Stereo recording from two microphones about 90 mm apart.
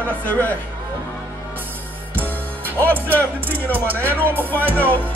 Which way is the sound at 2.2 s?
25° right (ahead or behind).